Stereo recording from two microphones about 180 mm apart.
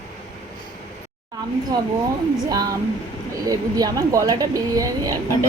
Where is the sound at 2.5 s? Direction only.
20° right (ahead or behind).